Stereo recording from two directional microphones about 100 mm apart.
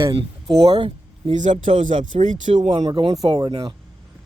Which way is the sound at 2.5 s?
90° right.